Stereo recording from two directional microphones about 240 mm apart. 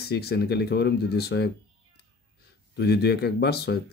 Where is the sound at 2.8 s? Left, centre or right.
Left.